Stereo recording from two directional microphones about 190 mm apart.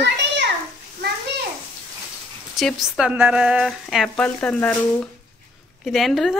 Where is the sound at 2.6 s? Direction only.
Centre (ahead or behind).